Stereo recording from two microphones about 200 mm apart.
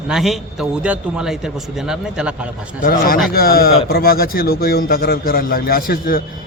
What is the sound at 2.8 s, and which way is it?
Speech, 45° left (ahead or behind).